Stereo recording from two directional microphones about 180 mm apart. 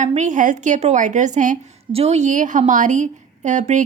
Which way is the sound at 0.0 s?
40° right (ahead or behind).